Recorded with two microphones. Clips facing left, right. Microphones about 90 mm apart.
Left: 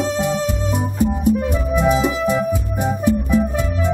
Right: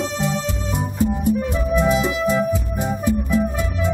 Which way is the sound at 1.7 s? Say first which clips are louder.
Left 2 dB; 20° left (ahead or behind).